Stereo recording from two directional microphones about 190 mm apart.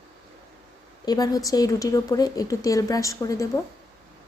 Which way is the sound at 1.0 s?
20° left (ahead or behind).